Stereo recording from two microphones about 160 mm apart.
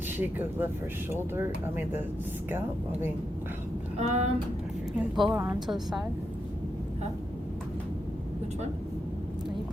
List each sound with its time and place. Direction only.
0.2 s speech: 10° right (ahead or behind)
3.9 s speech: 45° right (ahead or behind)
4.9 s a woman's voice: centre (ahead or behind)
5.3 s speech: 15° right (ahead or behind)
5.5 s a woman's voice: centre (ahead or behind)